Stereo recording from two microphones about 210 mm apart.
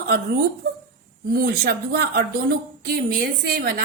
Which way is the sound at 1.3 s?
50° right (ahead or behind).